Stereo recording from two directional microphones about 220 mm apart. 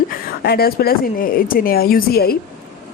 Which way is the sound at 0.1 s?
45° left (ahead or behind).